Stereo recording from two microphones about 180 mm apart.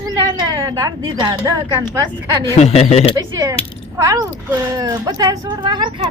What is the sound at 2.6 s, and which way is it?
Speech, 35° left (ahead or behind).